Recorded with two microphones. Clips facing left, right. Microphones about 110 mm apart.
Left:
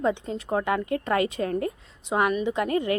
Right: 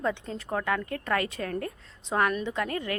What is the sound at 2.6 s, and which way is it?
Speech, 20° left (ahead or behind).